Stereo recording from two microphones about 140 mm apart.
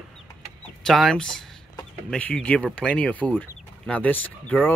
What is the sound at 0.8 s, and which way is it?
Speech, 5° left (ahead or behind).